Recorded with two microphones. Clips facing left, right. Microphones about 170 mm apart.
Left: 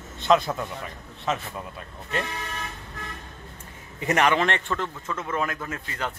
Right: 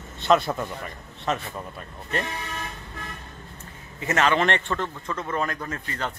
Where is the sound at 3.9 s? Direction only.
15° left (ahead or behind).